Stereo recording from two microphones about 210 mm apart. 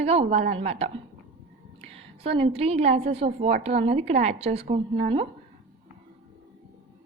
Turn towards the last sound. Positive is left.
turn(degrees=-35)  # may be behind; listen again after turning